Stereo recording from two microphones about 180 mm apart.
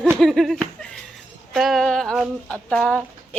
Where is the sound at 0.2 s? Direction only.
Centre (ahead or behind).